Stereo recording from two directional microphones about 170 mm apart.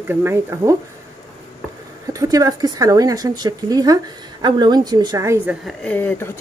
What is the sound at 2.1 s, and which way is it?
Speech, 20° right (ahead or behind).